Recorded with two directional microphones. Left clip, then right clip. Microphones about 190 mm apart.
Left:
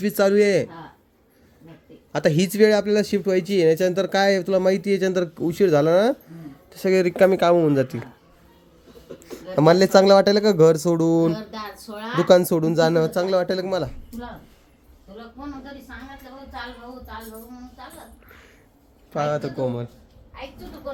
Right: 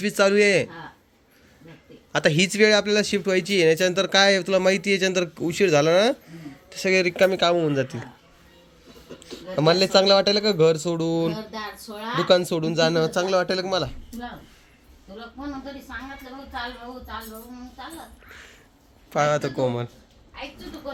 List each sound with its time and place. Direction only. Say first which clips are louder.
0.0 s speech: left 1 dB; 25° left (ahead or behind)
2.1 s speech: even; 20° left (ahead or behind)
9.6 s speech: left 3 dB; 40° left (ahead or behind)
11.3 s speech: even; 10° left (ahead or behind)
12.7 s speech: left 1 dB; 30° left (ahead or behind)
19.1 s speech: right 2 dB; 5° right (ahead or behind)